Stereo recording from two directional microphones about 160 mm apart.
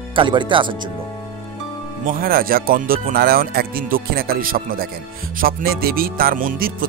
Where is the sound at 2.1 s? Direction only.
65° right (ahead or behind).